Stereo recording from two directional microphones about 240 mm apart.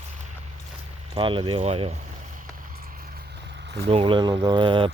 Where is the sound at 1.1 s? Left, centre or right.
Right.